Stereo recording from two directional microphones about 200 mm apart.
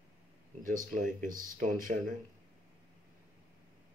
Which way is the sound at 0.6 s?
40° right (ahead or behind).